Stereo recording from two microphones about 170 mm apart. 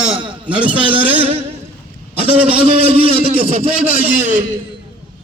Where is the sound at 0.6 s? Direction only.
30° right (ahead or behind).